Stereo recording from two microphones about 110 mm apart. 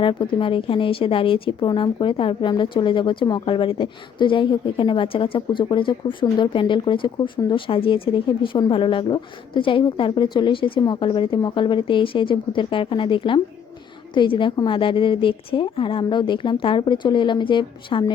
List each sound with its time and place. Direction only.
0.0 s a woman's voice: 50° left (ahead or behind)